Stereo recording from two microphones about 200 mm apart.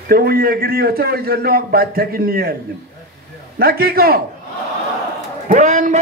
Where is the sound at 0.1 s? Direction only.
50° right (ahead or behind).